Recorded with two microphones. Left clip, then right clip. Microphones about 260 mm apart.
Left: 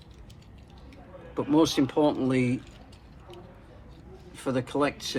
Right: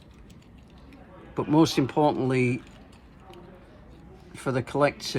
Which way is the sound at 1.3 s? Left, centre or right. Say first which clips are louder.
Right 1 dB; right.